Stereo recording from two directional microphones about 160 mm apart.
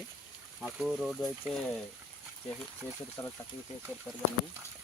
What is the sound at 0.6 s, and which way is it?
Speech, centre (ahead or behind).